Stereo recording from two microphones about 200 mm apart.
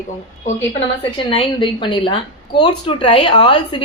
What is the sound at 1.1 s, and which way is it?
A woman's voice, 25° left (ahead or behind).